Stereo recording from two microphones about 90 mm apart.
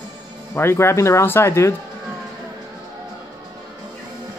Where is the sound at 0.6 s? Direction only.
30° left (ahead or behind).